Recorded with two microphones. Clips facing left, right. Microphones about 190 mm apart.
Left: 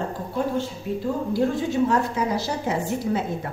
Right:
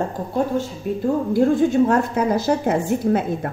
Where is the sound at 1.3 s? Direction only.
55° right (ahead or behind).